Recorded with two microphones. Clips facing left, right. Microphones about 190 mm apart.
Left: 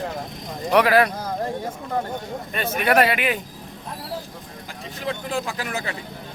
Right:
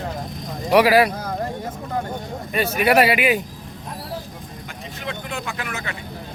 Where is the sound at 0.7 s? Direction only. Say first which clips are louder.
Right 2 dB; 5° right (ahead or behind).